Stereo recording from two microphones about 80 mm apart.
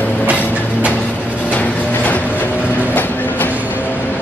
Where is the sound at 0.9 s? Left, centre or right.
Centre.